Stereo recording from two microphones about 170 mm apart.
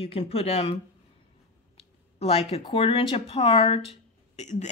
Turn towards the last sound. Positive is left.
turn(degrees=40)  # may be behind; listen again after turning